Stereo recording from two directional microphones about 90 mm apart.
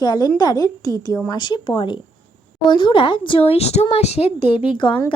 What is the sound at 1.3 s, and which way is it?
Speech, 55° left (ahead or behind).